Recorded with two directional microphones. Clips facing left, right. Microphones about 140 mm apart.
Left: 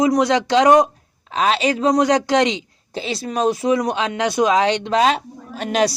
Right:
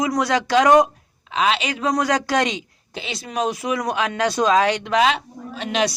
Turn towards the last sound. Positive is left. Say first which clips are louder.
# left 3 dB
turn(degrees=40)  # may be behind; listen again after turning